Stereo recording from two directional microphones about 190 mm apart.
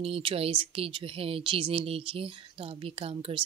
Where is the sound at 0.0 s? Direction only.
30° right (ahead or behind).